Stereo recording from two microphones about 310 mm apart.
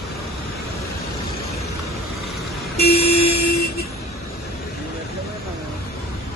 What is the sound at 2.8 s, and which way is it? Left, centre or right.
Vehicle, left.